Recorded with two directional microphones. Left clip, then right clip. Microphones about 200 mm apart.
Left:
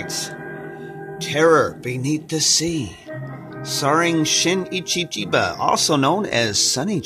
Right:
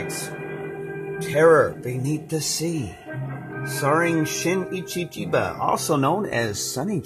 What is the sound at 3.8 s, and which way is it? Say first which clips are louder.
Speech: left 3 dB; 15° left (ahead or behind).